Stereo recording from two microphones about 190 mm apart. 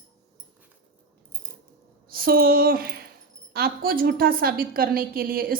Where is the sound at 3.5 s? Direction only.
50° right (ahead or behind).